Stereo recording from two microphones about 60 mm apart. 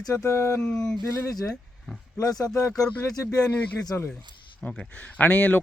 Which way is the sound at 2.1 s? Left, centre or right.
Left.